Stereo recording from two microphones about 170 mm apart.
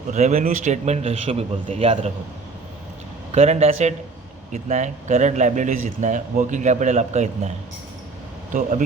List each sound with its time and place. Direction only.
0.1 s a man's voice: 45° right (ahead or behind)
3.3 s a man's voice: 40° right (ahead or behind)